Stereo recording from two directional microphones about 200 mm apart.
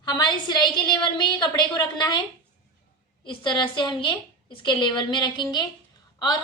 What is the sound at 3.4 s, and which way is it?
A woman's voice, 25° left (ahead or behind).